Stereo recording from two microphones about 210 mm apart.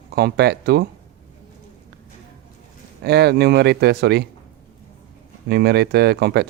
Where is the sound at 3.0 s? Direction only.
50° right (ahead or behind).